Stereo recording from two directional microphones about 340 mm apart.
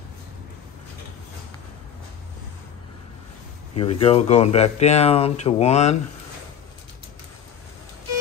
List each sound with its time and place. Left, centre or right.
3.7 s speech: centre